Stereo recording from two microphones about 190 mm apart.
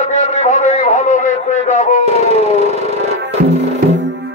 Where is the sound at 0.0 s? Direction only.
35° left (ahead or behind).